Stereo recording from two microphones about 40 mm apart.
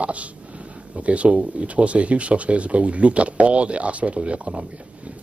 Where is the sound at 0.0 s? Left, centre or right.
Right.